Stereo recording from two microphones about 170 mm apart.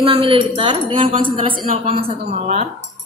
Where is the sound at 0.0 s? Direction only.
30° right (ahead or behind).